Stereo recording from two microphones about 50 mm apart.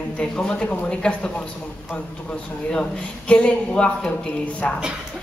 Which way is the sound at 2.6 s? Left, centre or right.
Left.